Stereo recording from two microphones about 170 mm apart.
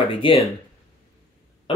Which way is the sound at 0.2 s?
30° left (ahead or behind).